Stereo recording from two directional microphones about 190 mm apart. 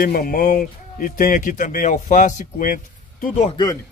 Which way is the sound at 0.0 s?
50° left (ahead or behind).